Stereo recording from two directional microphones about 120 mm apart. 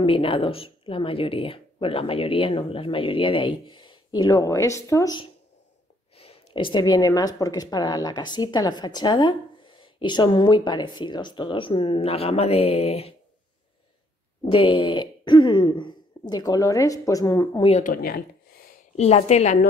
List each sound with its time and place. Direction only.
0.0 s speech: 50° left (ahead or behind); by 5.2 s 30° left (ahead or behind)
6.1 s speech: 55° left (ahead or behind)
14.5 s speech: 40° left (ahead or behind)
17.6 s a woman's voice: 65° left (ahead or behind)
18.9 s a woman's voice: 65° left (ahead or behind)